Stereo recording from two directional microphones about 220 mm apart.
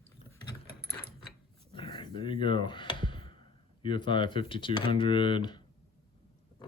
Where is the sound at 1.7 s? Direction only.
20° left (ahead or behind).